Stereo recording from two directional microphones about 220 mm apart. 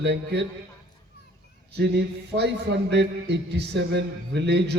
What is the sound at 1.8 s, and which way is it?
A man's voice, 50° right (ahead or behind).